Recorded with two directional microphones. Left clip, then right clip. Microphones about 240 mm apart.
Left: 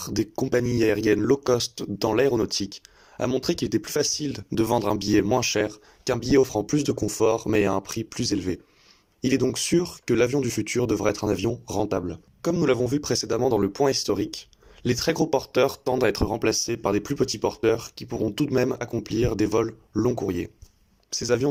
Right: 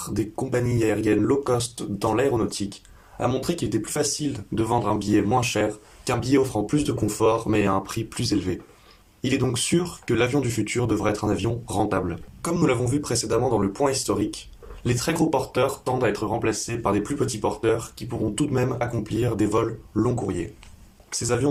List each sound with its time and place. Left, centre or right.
0.0 s speech: left